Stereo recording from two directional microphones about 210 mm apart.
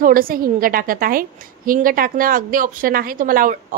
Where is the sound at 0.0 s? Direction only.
40° right (ahead or behind).